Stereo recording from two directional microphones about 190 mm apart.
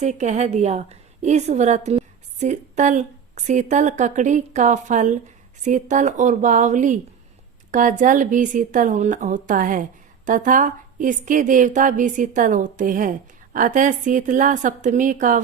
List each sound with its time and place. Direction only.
0.0 s a woman's voice: 40° right (ahead or behind)